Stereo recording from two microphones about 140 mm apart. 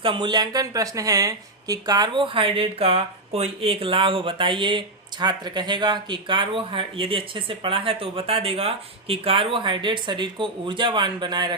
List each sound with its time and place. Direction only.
0.0 s speech: 35° right (ahead or behind)